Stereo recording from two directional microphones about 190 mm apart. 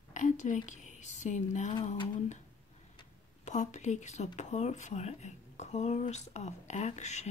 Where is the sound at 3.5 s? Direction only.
35° left (ahead or behind).